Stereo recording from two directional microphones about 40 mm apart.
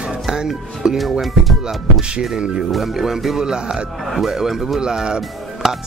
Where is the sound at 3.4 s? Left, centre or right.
Centre.